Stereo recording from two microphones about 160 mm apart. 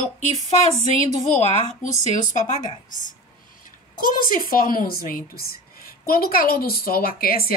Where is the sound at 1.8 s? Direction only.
50° left (ahead or behind).